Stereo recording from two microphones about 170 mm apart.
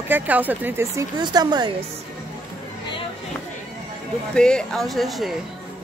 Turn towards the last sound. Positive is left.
turn(degrees=0)  # may be behind; listen again after turning